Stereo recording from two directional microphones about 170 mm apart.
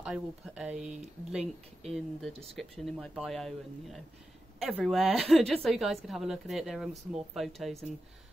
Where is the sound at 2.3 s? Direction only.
35° right (ahead or behind).